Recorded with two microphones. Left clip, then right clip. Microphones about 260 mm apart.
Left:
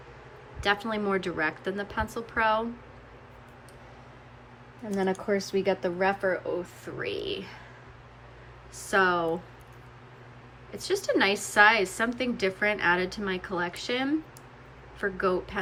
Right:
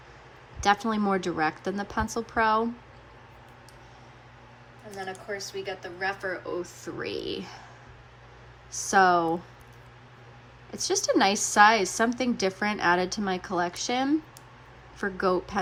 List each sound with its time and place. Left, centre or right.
0.6 s a woman's voice: centre
4.9 s speech: centre
6.6 s a woman's voice: centre
8.7 s a woman's voice: centre
10.7 s a woman's voice: centre